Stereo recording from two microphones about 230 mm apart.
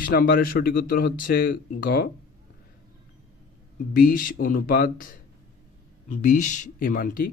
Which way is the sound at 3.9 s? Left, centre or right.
Left.